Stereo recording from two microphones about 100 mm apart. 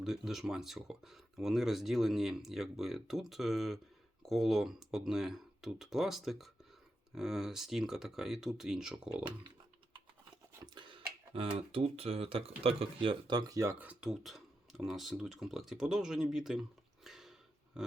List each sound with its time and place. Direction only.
0.0 s speech: 5° right (ahead or behind)
10.8 s speech: 60° right (ahead or behind)
13.7 s speech: 15° right (ahead or behind)
14.1 s speech: centre (ahead or behind)